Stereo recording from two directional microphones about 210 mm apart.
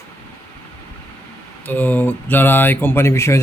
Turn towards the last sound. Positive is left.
turn(degrees=15)  # may be behind; listen again after turning